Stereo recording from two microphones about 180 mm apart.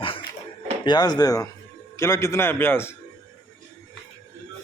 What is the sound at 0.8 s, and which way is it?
A man's voice, 25° left (ahead or behind).